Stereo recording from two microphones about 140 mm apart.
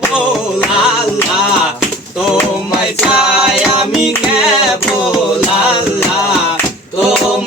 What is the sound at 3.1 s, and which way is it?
Music, 5° right (ahead or behind).